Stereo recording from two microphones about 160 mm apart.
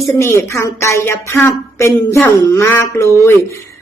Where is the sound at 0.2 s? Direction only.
15° left (ahead or behind).